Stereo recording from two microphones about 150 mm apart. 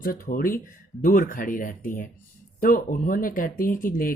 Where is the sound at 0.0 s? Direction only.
70° left (ahead or behind).